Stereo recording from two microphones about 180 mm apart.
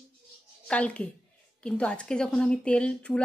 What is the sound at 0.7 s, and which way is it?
Speech, 5° left (ahead or behind).